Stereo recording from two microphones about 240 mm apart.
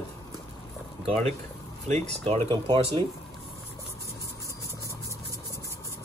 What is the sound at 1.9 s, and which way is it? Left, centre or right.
Speech, right.